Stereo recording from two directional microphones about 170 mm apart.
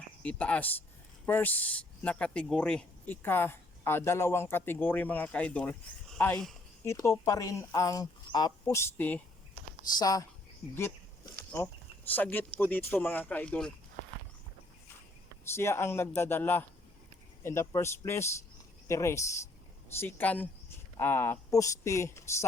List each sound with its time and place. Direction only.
0.2 s speech: 5° left (ahead or behind)
6.8 s speech: 15° left (ahead or behind)
10.0 s speech: 20° left (ahead or behind)
11.3 s speech: 15° left (ahead or behind)
15.5 s speech: 15° left (ahead or behind)